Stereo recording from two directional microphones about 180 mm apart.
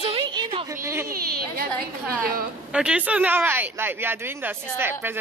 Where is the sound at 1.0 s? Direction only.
55° right (ahead or behind).